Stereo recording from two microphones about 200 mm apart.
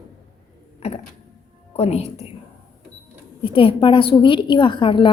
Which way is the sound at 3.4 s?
25° left (ahead or behind).